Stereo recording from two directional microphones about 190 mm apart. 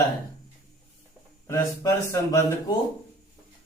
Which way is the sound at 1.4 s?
15° left (ahead or behind).